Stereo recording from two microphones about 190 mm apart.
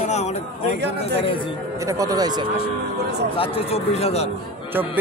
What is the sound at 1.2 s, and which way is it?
Speech, 25° left (ahead or behind).